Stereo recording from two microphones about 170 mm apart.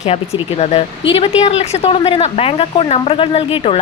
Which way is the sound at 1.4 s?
35° left (ahead or behind).